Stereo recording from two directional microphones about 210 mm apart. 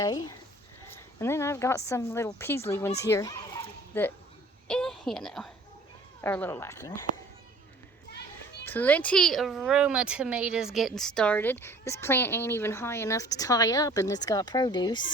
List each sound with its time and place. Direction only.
0.0 s speech: 15° left (ahead or behind)
3.1 s a sound: 15° left (ahead or behind)
4.7 s a woman's voice: 5° left (ahead or behind)
8.6 s speech: 10° left (ahead or behind)